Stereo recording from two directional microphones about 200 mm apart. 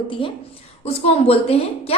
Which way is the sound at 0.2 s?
25° left (ahead or behind).